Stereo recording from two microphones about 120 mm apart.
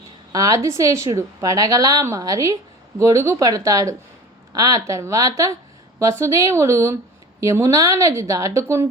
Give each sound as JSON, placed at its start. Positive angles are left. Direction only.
{"t": 0.3, "sound": "a woman's voice", "side_deg": -30}